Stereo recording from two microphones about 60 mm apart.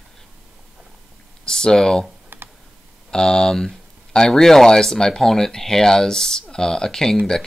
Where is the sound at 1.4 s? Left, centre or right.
Centre.